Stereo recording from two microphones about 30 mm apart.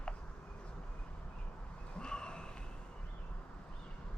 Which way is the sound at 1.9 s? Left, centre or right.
Left.